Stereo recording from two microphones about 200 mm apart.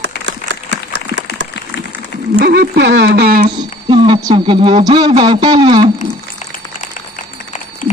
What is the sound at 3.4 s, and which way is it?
A man's voice, 25° right (ahead or behind).